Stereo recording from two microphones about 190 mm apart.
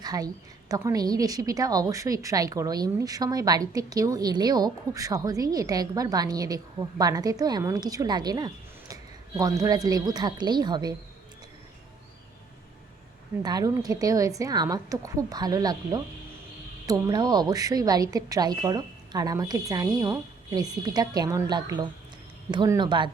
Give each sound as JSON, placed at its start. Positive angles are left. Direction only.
{"t": 0.0, "sound": "a woman's voice", "side_deg": -20}
{"t": 13.4, "sound": "a woman's voice", "side_deg": -20}